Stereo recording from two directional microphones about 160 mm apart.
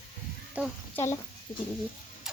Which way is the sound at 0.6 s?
10° right (ahead or behind).